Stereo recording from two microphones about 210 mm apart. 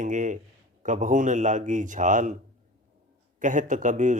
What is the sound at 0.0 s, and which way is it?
Speech, 35° right (ahead or behind).